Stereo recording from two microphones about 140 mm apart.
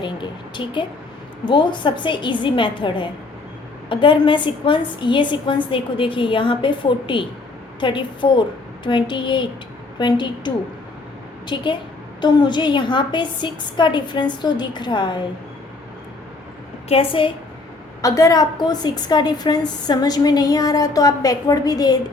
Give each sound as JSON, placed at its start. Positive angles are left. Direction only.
{"t": 0.0, "sound": "a woman's voice", "side_deg": 35}
{"t": 16.9, "sound": "a woman's voice", "side_deg": 40}
{"t": 18.0, "sound": "a woman's voice", "side_deg": 25}